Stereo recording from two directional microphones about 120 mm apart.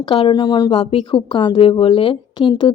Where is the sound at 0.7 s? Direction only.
50° left (ahead or behind).